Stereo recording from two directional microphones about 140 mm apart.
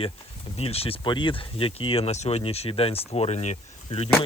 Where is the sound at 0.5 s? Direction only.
45° left (ahead or behind).